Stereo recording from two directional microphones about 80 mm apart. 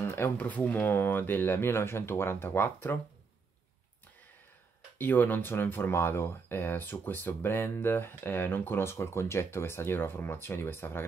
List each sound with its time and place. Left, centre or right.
0.0 s speech: left
4.9 s speech: left